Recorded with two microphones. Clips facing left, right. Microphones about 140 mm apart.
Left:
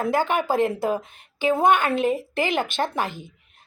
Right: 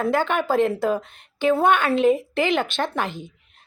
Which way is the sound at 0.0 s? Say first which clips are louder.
Right 1 dB; 10° left (ahead or behind).